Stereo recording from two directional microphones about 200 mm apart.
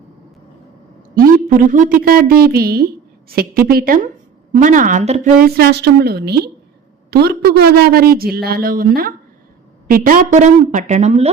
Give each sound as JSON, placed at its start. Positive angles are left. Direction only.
{"t": 1.1, "sound": "a woman's voice", "side_deg": -45}